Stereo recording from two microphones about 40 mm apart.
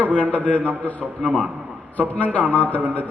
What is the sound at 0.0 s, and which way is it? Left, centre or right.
Speech, left.